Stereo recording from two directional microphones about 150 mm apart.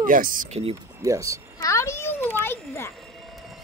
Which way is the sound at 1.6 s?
20° left (ahead or behind).